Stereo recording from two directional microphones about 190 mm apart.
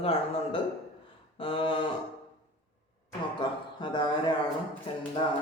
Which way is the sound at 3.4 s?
25° left (ahead or behind).